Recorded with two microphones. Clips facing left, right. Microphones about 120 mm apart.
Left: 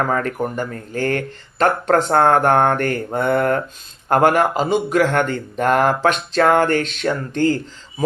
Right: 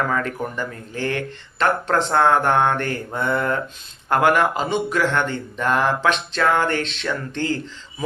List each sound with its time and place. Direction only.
0.1 s speech: 45° left (ahead or behind)
4.1 s speech: 40° left (ahead or behind)